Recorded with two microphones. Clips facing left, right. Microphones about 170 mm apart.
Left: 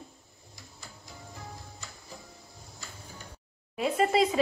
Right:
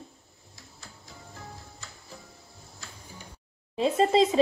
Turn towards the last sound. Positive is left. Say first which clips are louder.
# right 3 dB
turn(degrees=-25)  # may be behind; listen again after turning